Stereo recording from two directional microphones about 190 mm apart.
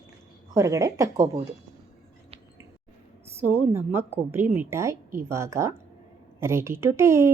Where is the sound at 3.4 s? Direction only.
10° right (ahead or behind).